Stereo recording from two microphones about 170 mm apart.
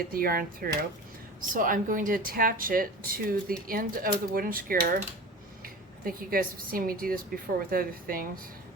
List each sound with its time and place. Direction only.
0.0 s speech: 60° right (ahead or behind)